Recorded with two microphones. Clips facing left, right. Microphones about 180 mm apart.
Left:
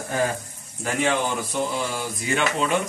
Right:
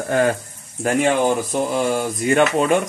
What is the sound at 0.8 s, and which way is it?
Speech, 55° right (ahead or behind).